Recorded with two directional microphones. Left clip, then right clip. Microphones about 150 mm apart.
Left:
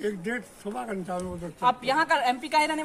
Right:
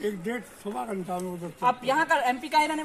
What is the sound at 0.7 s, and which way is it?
Speech, 10° right (ahead or behind).